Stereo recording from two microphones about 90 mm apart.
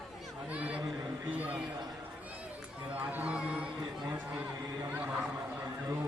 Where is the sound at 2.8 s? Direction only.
15° right (ahead or behind).